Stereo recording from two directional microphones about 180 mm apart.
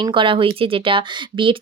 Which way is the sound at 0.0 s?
30° right (ahead or behind).